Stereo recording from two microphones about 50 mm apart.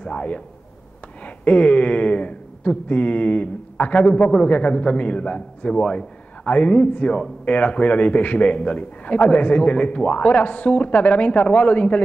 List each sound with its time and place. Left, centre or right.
0.0 s a man's voice: left